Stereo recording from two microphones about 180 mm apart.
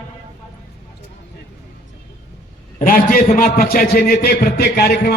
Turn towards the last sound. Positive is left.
turn(degrees=60)  # may be behind; listen again after turning